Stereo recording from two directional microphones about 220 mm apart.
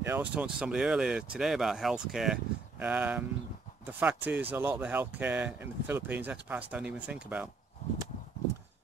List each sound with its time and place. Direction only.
0.0 s speech: 10° right (ahead or behind)